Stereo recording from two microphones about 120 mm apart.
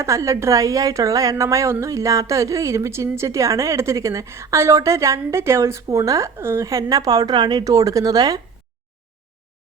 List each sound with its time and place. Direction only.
0.0 s a woman's voice: 25° right (ahead or behind)